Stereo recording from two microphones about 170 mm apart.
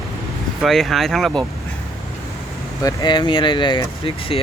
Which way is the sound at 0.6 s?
Centre (ahead or behind).